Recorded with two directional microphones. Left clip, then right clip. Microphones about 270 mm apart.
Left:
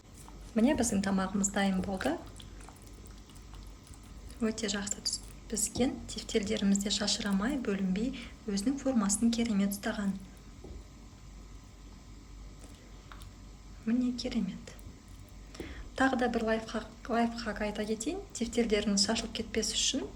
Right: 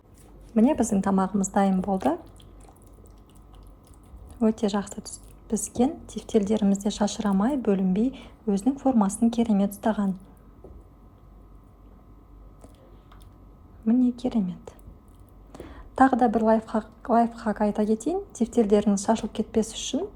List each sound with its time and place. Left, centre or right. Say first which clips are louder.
0.5 s a woman's voice: right 6 dB; right
4.4 s a woman's voice: right 9 dB; centre
13.8 s a woman's voice: right 9 dB; centre
15.5 s a sound: right 11 dB; centre
16.6 s a woman's voice: right 10 dB; centre